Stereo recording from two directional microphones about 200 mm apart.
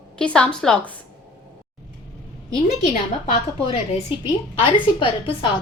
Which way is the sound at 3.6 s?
30° left (ahead or behind).